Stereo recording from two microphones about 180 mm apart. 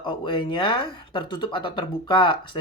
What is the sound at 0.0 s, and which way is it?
Speech, 25° left (ahead or behind).